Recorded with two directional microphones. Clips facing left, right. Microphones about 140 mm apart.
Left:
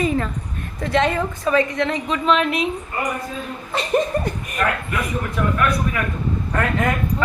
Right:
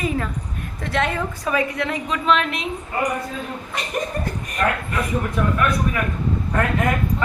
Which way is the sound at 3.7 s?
30° left (ahead or behind).